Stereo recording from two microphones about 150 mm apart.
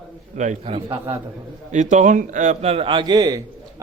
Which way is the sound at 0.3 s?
50° right (ahead or behind).